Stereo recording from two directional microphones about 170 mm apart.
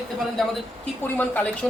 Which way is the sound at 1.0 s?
10° left (ahead or behind).